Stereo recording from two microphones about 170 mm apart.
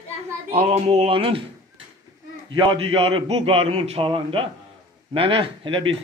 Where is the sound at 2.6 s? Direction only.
30° right (ahead or behind).